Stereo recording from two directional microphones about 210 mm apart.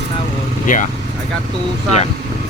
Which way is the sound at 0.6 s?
40° left (ahead or behind).